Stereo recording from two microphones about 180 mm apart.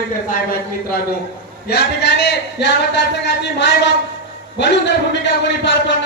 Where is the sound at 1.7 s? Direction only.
65° left (ahead or behind).